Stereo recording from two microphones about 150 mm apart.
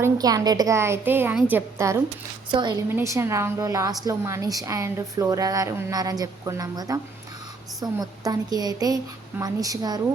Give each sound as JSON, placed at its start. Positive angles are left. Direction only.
{"t": 0.0, "sound": "a woman's voice", "side_deg": -25}
{"t": 2.5, "sound": "a woman's voice", "side_deg": -30}
{"t": 2.9, "sound": "a woman's voice", "side_deg": -20}